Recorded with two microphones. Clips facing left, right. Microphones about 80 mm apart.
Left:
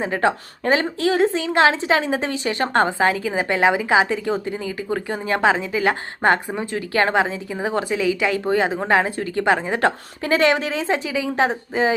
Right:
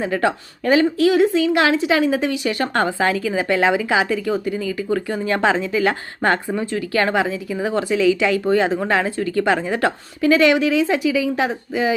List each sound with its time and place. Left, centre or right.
0.0 s a woman's voice: left